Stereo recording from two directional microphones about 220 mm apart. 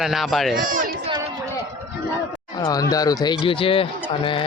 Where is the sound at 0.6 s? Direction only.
40° right (ahead or behind).